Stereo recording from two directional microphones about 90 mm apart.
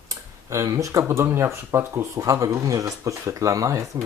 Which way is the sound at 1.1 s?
30° right (ahead or behind).